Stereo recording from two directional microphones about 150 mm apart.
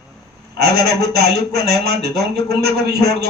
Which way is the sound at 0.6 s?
90° right.